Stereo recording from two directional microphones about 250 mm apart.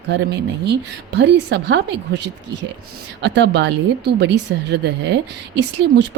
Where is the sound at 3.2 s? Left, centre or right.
Right.